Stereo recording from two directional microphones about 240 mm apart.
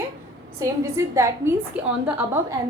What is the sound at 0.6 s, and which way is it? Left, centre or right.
A woman's voice, centre.